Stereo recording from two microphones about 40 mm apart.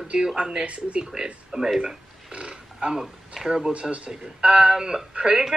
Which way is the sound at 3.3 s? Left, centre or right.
Centre.